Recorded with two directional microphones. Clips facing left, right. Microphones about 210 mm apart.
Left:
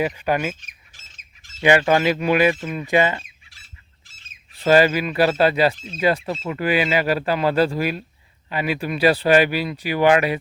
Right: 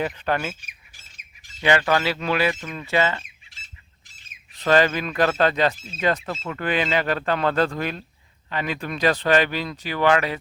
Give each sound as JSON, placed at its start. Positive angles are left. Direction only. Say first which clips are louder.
{"t": 0.0, "sound": "speech", "louder": "left 3 dB", "side_deg": 10}
{"t": 0.6, "sound": "squawk", "louder": "even", "side_deg": -10}
{"t": 1.8, "sound": "speech", "louder": "left 4 dB", "side_deg": 20}
{"t": 4.6, "sound": "speech", "louder": "left 3 dB", "side_deg": 10}
{"t": 5.7, "sound": "speech", "louder": "left 5 dB", "side_deg": -5}
{"t": 6.0, "sound": "speech", "louder": "left 3 dB", "side_deg": 10}